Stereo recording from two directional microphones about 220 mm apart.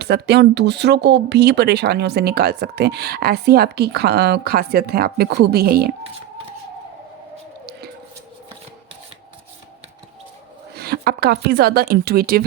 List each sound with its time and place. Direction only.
0.0 s speech: 50° right (ahead or behind)
10.8 s speech: 45° right (ahead or behind)